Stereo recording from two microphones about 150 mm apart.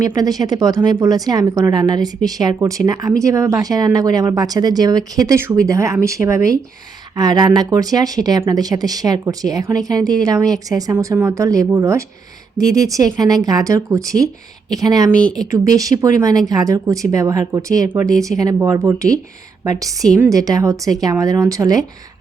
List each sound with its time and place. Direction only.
0.0 s speech: 25° right (ahead or behind)
15.2 s speech: 5° left (ahead or behind)
15.4 s speech: 25° right (ahead or behind)